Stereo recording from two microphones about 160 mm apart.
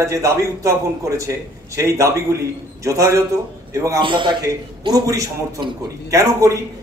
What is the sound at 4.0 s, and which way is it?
A man's voice, 30° right (ahead or behind).